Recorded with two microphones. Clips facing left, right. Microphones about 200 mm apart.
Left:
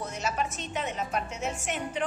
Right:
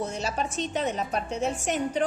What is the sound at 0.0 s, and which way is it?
A woman's voice, 30° right (ahead or behind).